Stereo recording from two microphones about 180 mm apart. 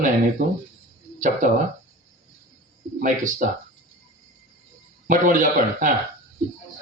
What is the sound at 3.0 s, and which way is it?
Speech, 45° right (ahead or behind).